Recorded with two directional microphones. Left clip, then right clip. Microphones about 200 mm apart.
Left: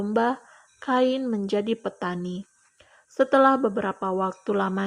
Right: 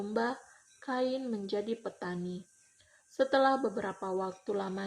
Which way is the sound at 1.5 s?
45° left (ahead or behind).